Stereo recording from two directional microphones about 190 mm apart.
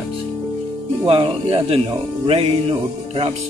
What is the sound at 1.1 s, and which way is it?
Speech, 30° right (ahead or behind).